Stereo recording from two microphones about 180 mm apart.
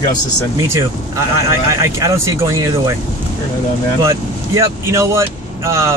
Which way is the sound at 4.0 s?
15° right (ahead or behind).